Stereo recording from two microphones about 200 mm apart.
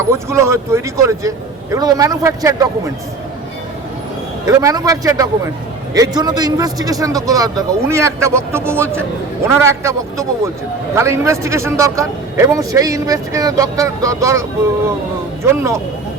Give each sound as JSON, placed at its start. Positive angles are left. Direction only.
{"t": 0.1, "sound": "a man's voice", "side_deg": -15}
{"t": 4.4, "sound": "a man's voice", "side_deg": -15}
{"t": 15.4, "sound": "a man's voice", "side_deg": -15}